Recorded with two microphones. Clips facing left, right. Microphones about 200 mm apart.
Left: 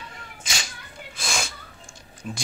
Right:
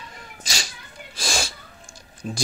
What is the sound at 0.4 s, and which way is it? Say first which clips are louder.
Cat: right 1 dB; 35° right (ahead or behind).